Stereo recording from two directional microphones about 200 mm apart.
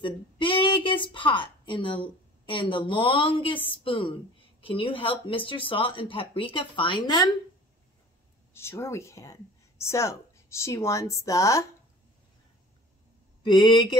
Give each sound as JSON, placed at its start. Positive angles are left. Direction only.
{"t": 0.0, "sound": "speech", "side_deg": 25}
{"t": 8.5, "sound": "speech", "side_deg": 15}
{"t": 13.4, "sound": "speech", "side_deg": 25}